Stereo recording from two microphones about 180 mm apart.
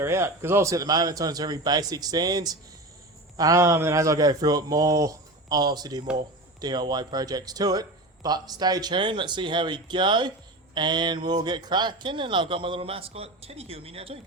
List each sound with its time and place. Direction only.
0.0 s speech: 15° right (ahead or behind); by 14.2 s 30° right (ahead or behind)